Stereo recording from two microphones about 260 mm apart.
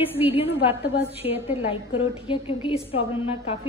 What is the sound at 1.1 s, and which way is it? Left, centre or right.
A woman's voice, left.